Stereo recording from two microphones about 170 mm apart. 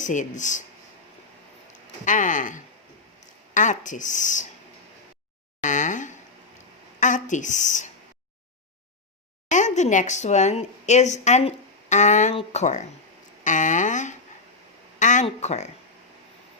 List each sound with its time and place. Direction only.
0.0 s speech: 45° left (ahead or behind)
2.0 s speech: 50° left (ahead or behind)
5.6 s speech: 45° left (ahead or behind)
9.5 s a woman's voice: 45° left (ahead or behind)
13.4 s a sound: 50° left (ahead or behind)